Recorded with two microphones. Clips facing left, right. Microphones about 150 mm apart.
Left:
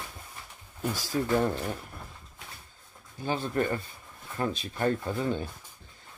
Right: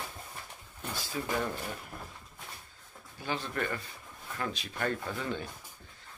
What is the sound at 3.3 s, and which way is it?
Speech, 35° left (ahead or behind).